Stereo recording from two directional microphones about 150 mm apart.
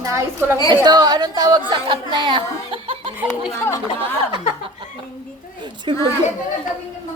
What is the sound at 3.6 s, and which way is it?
Speech, 15° left (ahead or behind).